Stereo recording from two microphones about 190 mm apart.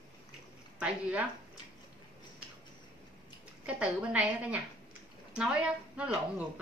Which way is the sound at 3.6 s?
5° right (ahead or behind).